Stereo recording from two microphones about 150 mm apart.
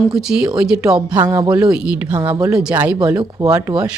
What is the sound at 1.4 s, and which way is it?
A woman's voice, 10° right (ahead or behind).